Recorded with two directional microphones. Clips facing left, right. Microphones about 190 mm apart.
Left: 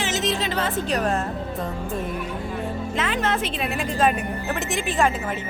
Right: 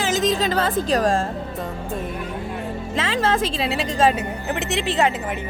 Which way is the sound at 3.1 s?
90° right.